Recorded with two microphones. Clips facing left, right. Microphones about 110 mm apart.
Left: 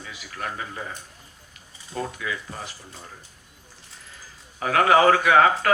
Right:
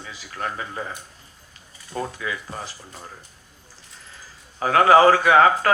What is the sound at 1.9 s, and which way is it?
Speech, 30° right (ahead or behind).